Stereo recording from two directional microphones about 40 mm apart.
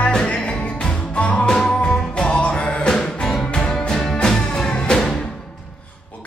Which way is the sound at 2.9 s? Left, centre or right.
Centre.